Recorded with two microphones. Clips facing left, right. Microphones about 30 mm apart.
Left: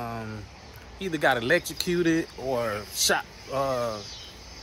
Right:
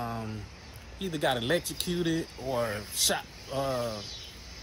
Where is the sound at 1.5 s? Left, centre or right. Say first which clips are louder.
Left 5 dB; left.